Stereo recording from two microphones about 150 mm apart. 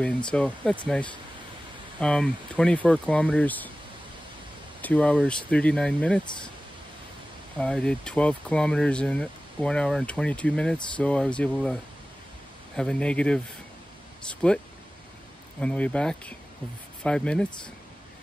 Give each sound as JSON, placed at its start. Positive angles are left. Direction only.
{"t": 0.0, "sound": "speech", "side_deg": 5}
{"t": 4.8, "sound": "speech", "side_deg": 10}
{"t": 7.5, "sound": "speech", "side_deg": 5}
{"t": 15.6, "sound": "speech", "side_deg": 10}